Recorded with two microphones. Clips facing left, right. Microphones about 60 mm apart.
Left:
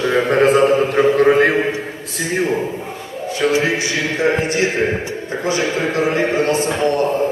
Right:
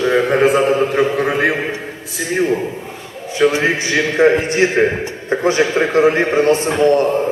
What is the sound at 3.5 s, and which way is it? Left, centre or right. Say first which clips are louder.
A man's voice: right 1 dB; right.